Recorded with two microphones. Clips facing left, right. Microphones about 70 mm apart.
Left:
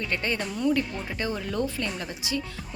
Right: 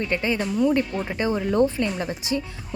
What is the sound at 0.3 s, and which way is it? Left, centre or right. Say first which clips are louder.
Speech: right 6 dB; centre.